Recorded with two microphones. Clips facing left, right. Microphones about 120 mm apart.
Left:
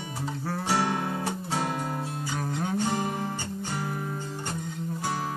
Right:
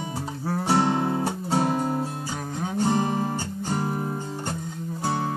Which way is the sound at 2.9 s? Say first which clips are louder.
Right 5 dB; 30° right (ahead or behind).